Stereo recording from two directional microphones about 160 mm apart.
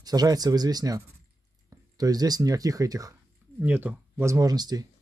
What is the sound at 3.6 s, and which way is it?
Speech, 10° right (ahead or behind).